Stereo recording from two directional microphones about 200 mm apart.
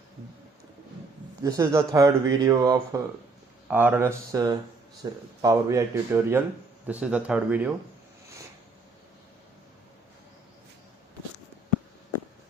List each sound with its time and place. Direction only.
1.4 s speech: 15° right (ahead or behind)